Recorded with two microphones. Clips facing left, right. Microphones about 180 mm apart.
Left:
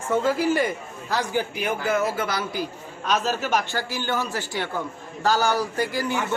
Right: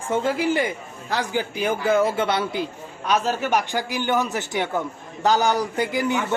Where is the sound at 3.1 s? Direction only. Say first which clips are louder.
Right 2 dB; 10° right (ahead or behind).